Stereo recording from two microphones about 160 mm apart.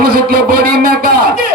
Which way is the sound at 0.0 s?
65° right (ahead or behind).